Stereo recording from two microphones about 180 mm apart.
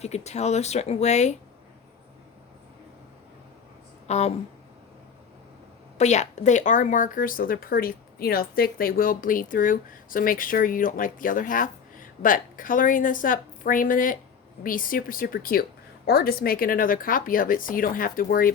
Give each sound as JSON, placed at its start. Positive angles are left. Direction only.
{"t": 0.0, "sound": "speech", "side_deg": 40}
{"t": 4.0, "sound": "speech", "side_deg": 35}
{"t": 6.0, "sound": "speech", "side_deg": 40}